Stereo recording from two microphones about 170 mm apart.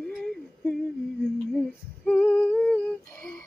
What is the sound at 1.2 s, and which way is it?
Female singing, centre (ahead or behind).